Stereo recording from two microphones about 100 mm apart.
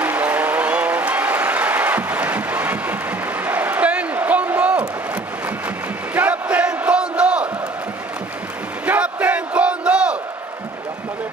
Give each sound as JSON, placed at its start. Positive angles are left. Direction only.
{"t": 0.0, "sound": "applause", "side_deg": -15}
{"t": 6.1, "sound": "crowd", "side_deg": -15}
{"t": 8.8, "sound": "battle cry", "side_deg": -15}